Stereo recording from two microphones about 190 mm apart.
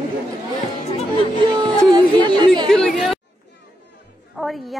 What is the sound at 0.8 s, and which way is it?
Music, 35° left (ahead or behind).